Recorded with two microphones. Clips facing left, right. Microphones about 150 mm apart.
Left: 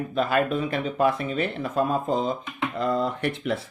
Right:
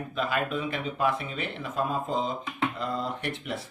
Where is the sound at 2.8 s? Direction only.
55° left (ahead or behind).